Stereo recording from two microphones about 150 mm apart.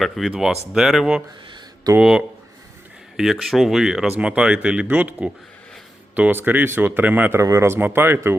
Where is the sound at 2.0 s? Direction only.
5° right (ahead or behind).